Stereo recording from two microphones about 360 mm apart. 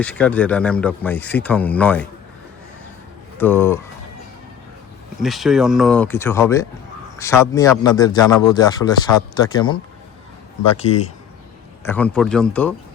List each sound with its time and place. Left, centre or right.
0.0 s speech: centre
3.3 s speech: centre
5.2 s speech: centre
10.8 s speech: centre
11.9 s speech: centre